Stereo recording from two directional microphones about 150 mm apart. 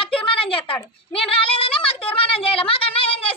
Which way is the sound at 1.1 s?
40° left (ahead or behind).